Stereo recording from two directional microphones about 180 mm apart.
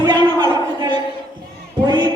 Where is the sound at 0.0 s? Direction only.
25° right (ahead or behind).